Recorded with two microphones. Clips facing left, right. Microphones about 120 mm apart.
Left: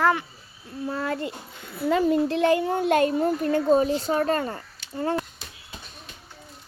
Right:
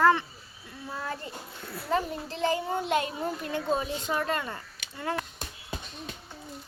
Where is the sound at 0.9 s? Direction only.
80° left; by 5.2 s 35° left (ahead or behind).